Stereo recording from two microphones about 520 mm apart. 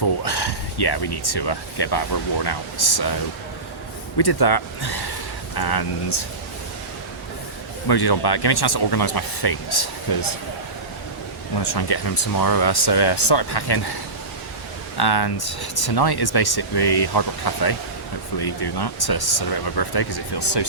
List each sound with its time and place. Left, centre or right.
0.0 s speech: left
4.2 s speech: left
7.9 s speech: left
11.5 s speech: left
14.9 s speech: left